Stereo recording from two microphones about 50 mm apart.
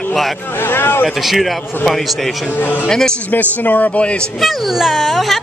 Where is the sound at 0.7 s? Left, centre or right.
Left.